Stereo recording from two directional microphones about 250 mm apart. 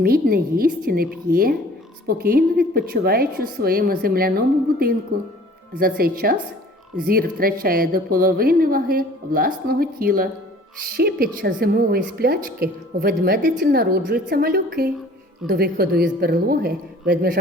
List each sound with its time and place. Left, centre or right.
0.0 s a woman's voice: right